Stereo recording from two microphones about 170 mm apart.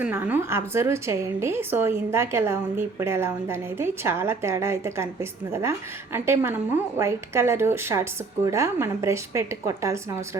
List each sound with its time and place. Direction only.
0.0 s a woman's voice: 10° right (ahead or behind)